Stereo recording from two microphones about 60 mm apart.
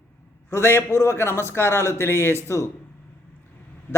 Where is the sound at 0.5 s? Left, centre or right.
Left.